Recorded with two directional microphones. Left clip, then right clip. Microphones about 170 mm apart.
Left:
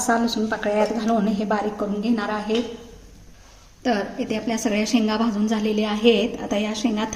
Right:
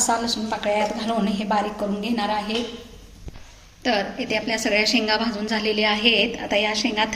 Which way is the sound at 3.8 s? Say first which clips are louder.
Right 1 dB; 50° left (ahead or behind).